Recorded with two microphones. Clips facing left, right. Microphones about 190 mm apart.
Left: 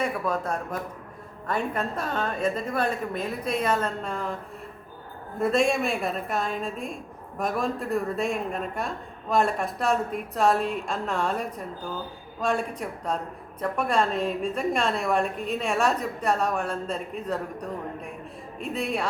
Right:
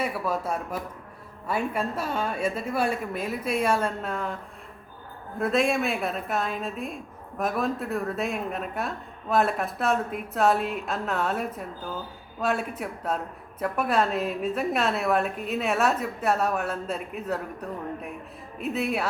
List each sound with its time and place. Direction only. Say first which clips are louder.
0.0 s a woman's voice: left 1 dB; 5° right (ahead or behind)
5.4 s a woman's voice: left 1 dB; centre (ahead or behind)